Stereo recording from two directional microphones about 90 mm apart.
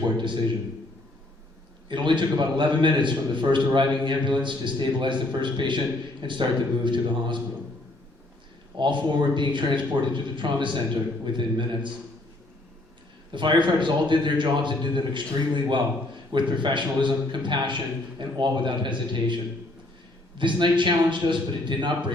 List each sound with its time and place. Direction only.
1.9 s a man's voice: 60° right (ahead or behind)
8.8 s a man's voice: 60° right (ahead or behind)
13.3 s a man's voice: 60° right (ahead or behind)
20.4 s a man's voice: 60° right (ahead or behind)